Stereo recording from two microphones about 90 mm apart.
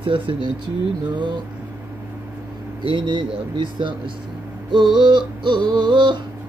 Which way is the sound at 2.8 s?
60° right (ahead or behind).